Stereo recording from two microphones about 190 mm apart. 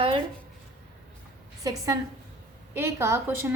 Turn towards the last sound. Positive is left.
turn(degrees=-10)  # may be behind; listen again after turning